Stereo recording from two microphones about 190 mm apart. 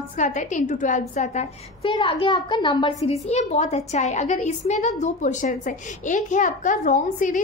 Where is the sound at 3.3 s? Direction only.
35° left (ahead or behind).